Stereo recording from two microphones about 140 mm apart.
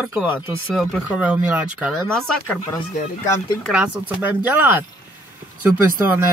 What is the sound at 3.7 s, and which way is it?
Speech, 10° right (ahead or behind).